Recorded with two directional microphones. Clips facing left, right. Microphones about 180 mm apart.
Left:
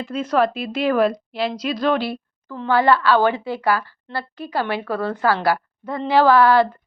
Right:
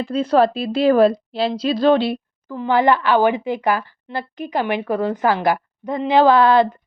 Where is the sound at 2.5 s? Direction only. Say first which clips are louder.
Right 1 dB; 15° right (ahead or behind).